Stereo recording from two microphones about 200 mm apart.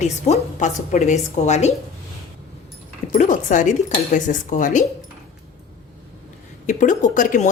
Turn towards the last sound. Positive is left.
turn(degrees=40)  # may be behind; listen again after turning